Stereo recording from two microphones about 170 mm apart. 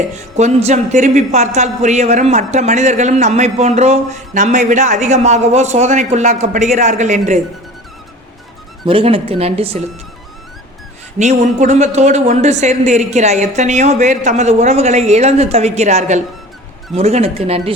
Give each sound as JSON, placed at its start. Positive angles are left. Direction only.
{"t": 0.1, "sound": "a woman's voice", "side_deg": -40}
{"t": 8.9, "sound": "speech", "side_deg": -30}
{"t": 11.2, "sound": "speech", "side_deg": -45}